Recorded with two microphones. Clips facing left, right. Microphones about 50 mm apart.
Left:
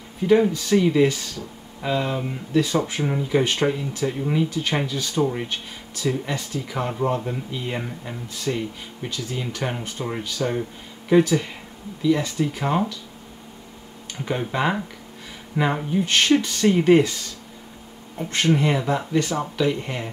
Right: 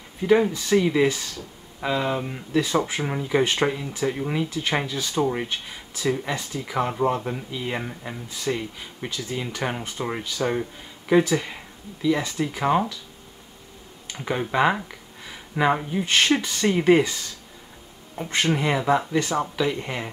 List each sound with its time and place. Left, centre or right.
0.3 s speech: centre
14.1 s speech: centre
18.1 s speech: centre